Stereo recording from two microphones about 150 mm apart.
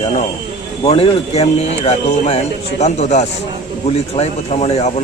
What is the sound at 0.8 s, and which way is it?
Speech, 40° left (ahead or behind).